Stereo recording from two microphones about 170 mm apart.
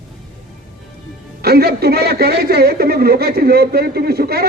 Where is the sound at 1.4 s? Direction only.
65° right (ahead or behind).